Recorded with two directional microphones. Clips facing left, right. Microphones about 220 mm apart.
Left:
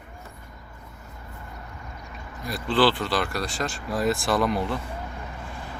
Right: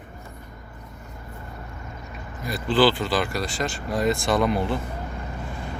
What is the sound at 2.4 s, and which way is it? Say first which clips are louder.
Speech: right 2 dB; centre (ahead or behind).